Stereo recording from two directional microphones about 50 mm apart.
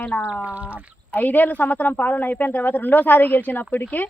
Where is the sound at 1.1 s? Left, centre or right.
Left.